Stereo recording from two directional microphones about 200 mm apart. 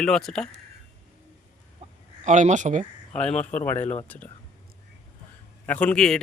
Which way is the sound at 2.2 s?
40° right (ahead or behind).